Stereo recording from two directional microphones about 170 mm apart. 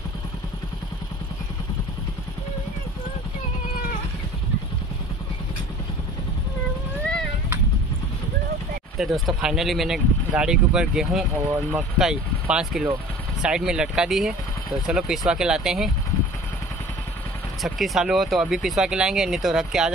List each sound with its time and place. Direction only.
8.9 s speech: centre (ahead or behind)
17.6 s speech: centre (ahead or behind)